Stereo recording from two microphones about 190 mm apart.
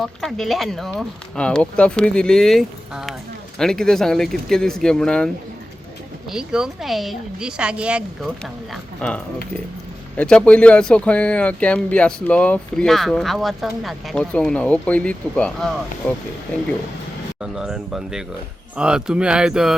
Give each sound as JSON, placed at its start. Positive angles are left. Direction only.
{"t": 0.0, "sound": "speech", "side_deg": 0}
{"t": 6.3, "sound": "speech", "side_deg": -5}
{"t": 8.7, "sound": "speech", "side_deg": 5}
{"t": 17.4, "sound": "speech", "side_deg": -5}